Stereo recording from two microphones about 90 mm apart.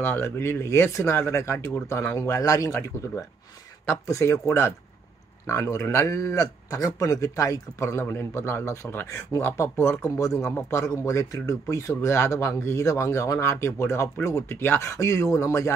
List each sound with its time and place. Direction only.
0.0 s speech: 25° left (ahead or behind)
10.0 s speech: 35° left (ahead or behind)